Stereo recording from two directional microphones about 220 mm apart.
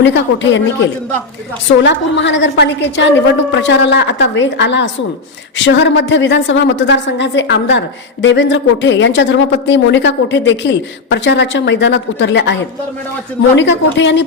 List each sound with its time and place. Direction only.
0.0 s a woman's voice: 55° left (ahead or behind)
1.8 s a woman's voice: 55° left (ahead or behind)
13.6 s a woman's voice: 55° left (ahead or behind)